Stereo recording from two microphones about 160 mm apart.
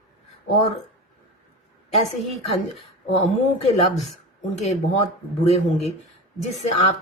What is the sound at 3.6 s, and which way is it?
Speech, 45° left (ahead or behind).